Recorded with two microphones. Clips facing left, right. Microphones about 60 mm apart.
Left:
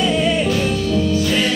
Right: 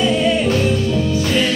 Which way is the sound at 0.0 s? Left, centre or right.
Centre.